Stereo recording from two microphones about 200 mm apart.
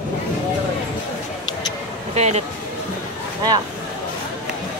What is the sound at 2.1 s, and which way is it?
Speech, 35° right (ahead or behind).